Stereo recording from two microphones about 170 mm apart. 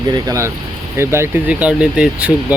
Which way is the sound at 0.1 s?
20° right (ahead or behind).